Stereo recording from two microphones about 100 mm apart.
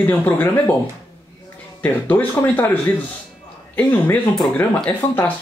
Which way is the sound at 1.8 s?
15° left (ahead or behind).